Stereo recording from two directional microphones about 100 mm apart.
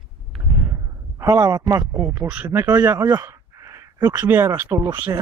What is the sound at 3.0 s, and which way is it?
Speech, 40° right (ahead or behind).